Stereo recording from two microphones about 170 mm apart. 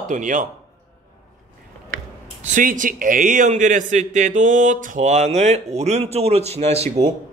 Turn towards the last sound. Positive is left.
turn(degrees=-40)  # may be behind; listen again after turning